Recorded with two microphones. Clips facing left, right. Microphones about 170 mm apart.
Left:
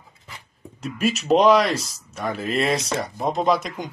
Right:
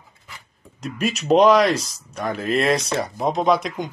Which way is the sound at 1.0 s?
Centre (ahead or behind).